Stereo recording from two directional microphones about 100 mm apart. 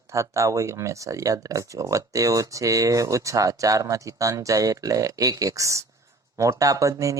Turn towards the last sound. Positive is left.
turn(degrees=-35)  # may be behind; listen again after turning